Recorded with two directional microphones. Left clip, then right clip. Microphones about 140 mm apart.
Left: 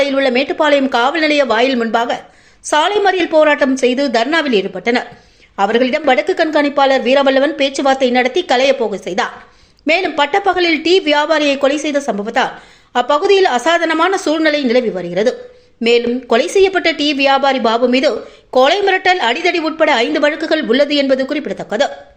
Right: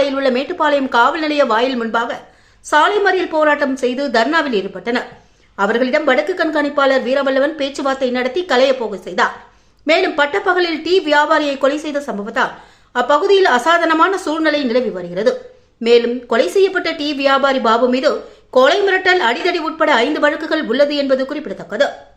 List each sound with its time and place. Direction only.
0.0 s a woman's voice: 15° left (ahead or behind)